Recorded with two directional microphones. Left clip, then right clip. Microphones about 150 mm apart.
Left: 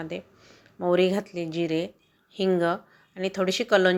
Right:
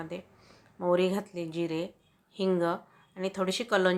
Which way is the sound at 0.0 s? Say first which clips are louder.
Left 5 dB; 15° left (ahead or behind).